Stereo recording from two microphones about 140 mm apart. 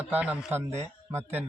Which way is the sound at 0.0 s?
10° right (ahead or behind).